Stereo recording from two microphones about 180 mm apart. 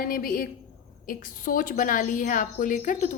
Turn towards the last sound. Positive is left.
turn(degrees=45)  # may be behind; listen again after turning